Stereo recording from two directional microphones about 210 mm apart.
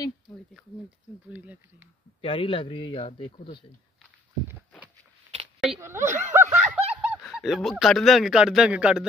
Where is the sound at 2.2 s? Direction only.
25° left (ahead or behind).